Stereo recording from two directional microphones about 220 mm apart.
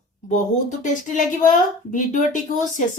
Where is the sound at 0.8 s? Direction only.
35° left (ahead or behind).